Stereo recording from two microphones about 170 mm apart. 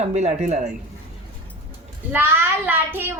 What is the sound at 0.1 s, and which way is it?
Speech, 40° right (ahead or behind).